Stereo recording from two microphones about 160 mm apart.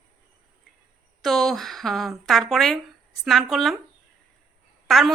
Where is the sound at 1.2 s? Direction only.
Centre (ahead or behind).